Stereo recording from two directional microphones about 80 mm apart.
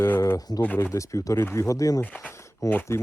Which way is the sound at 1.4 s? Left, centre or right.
Left.